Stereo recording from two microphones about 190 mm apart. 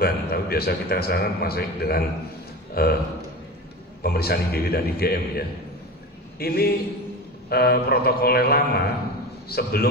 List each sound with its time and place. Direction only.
0.0 s a man's voice: 55° left (ahead or behind)
4.0 s a man's voice: 55° left (ahead or behind)
6.4 s a man's voice: 55° left (ahead or behind)